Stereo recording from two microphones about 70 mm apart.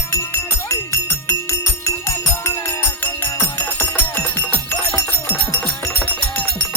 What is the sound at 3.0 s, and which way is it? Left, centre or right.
Music, left.